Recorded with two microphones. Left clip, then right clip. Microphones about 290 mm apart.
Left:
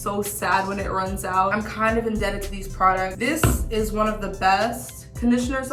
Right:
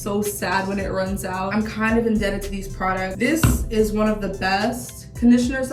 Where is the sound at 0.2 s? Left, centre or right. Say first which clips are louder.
Left 1 dB; centre.